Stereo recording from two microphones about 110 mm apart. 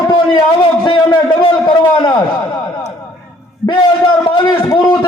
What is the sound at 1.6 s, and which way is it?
Speech, 40° left (ahead or behind).